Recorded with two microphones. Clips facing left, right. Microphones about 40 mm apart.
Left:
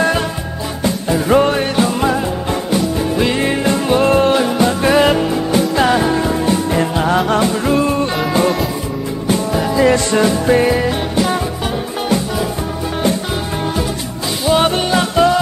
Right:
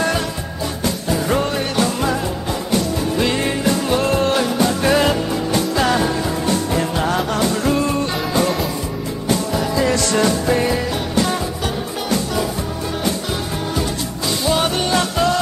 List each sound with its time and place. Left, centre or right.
0.8 s music: left
3.5 s music: left
5.6 s music: centre
6.1 s music: left
14.8 s music: centre